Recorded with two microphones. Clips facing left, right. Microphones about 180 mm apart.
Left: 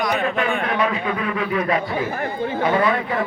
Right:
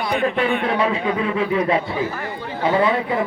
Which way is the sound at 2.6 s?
20° right (ahead or behind).